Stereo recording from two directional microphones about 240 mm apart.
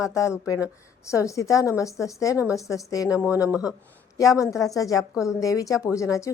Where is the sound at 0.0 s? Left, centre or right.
Centre.